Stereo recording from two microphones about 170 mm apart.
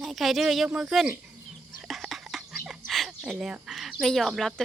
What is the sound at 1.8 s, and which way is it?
Bird, centre (ahead or behind).